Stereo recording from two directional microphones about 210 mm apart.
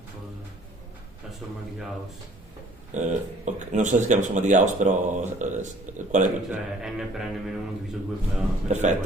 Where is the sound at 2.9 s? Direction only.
35° right (ahead or behind).